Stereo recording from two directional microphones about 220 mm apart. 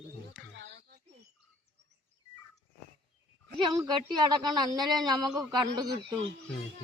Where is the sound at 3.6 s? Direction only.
20° right (ahead or behind).